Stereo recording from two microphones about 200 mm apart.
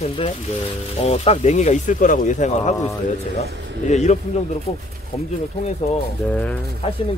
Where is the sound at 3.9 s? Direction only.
35° left (ahead or behind).